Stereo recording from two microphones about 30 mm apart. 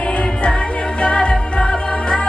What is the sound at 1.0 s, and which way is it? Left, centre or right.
Music, left.